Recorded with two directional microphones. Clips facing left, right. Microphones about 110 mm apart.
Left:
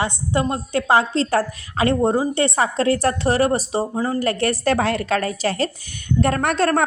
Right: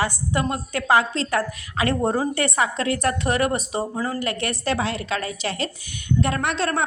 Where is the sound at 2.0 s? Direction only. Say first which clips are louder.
Left 4 dB; 20° left (ahead or behind).